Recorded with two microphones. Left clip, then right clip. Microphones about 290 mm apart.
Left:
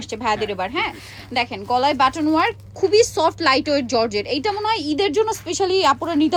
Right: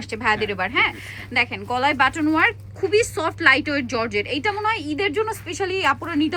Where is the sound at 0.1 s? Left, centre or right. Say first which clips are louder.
Even; centre.